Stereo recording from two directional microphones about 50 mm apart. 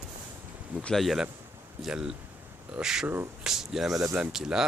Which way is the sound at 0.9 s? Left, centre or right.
Centre.